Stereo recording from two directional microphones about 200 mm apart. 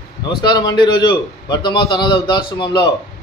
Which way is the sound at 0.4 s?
20° left (ahead or behind).